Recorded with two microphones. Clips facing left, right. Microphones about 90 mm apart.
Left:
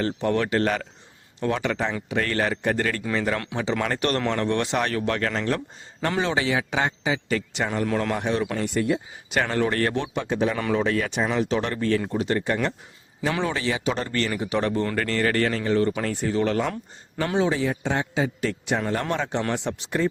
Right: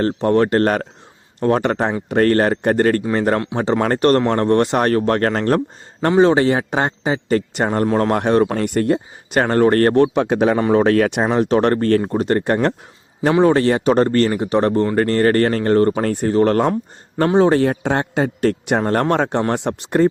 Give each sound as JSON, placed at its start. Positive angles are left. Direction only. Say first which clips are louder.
{"t": 0.0, "sound": "speech", "louder": "right 8 dB", "side_deg": -40}